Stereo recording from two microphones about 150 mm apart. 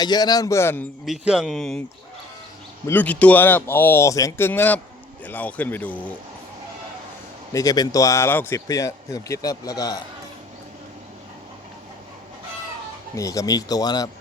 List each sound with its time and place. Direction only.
0.0 s speech: 25° left (ahead or behind)
1.0 s speech: 5° right (ahead or behind)
2.8 s speech: 10° left (ahead or behind)
7.5 s speech: 25° left (ahead or behind)
13.1 s speech: 20° left (ahead or behind)